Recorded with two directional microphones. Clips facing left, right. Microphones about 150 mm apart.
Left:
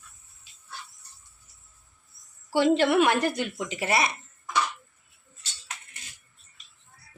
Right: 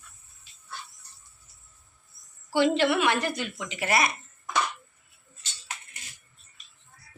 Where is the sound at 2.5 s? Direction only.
45° left (ahead or behind).